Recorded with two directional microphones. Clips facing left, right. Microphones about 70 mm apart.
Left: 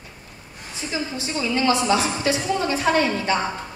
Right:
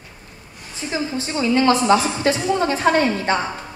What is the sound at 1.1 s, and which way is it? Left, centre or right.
A woman's voice, right.